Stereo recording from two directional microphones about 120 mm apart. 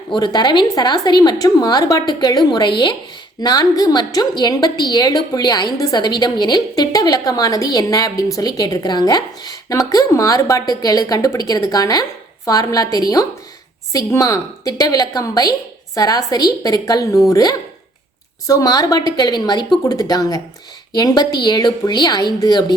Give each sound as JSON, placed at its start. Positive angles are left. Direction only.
{"t": 0.1, "sound": "a woman's voice", "side_deg": 40}